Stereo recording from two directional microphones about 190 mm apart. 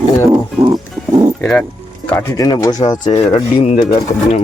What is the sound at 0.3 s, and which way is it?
Music, 20° right (ahead or behind).